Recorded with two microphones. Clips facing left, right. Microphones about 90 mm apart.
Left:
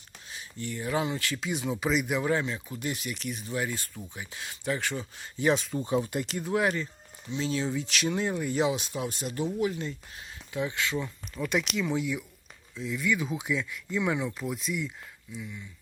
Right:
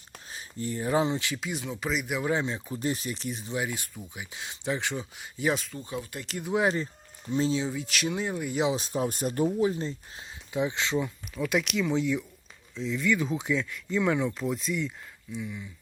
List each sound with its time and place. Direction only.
0.3 s speech: 35° right (ahead or behind); by 1.4 s 20° right (ahead or behind)
1.4 s speech: centre (ahead or behind)
2.3 s speech: 25° right (ahead or behind); by 5.7 s centre (ahead or behind)
5.7 s speech: 25° left (ahead or behind)
6.2 s speech: centre (ahead or behind)
6.5 s speech: 20° right (ahead or behind)
7.3 s speech: 40° right (ahead or behind)
7.7 s speech: 5° right (ahead or behind)
8.7 s speech: 35° right (ahead or behind)
9.6 s speech: 30° right (ahead or behind)
11.3 s speech: centre (ahead or behind)